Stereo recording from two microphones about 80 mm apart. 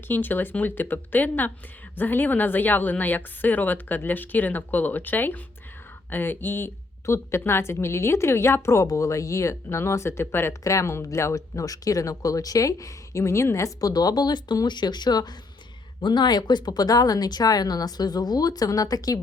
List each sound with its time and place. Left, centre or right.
0.1 s a woman's voice: left
7.0 s a woman's voice: left